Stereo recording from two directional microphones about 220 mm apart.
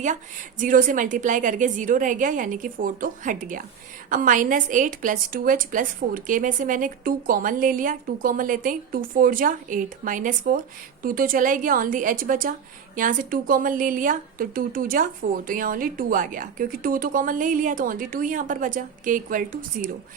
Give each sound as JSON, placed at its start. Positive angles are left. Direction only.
{"t": 0.6, "sound": "a woman's voice", "side_deg": -35}